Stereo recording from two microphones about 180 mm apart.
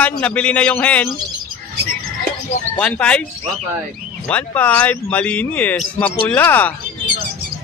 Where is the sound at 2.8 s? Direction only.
5° left (ahead or behind).